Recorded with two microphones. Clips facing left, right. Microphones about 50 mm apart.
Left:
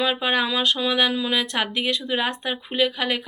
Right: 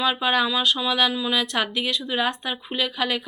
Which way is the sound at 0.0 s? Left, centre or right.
Left.